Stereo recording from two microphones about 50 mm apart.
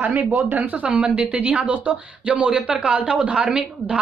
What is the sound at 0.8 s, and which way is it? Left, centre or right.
Speech, right.